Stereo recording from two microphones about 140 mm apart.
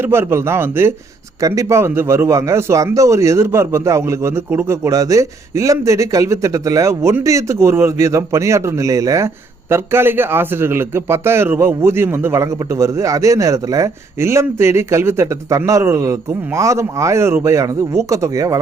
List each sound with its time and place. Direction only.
0.0 s a man's voice: 15° right (ahead or behind)